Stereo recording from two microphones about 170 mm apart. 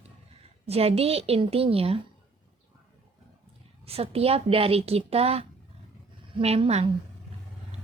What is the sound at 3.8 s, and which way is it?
A woman's voice, 35° right (ahead or behind).